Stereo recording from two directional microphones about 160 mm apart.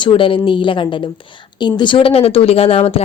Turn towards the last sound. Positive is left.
turn(degrees=35)  # may be behind; listen again after turning